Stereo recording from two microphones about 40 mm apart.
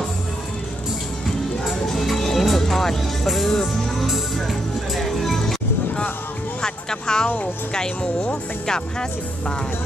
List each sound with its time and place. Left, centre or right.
1.9 s music: centre
6.6 s music: centre
7.7 s speech: centre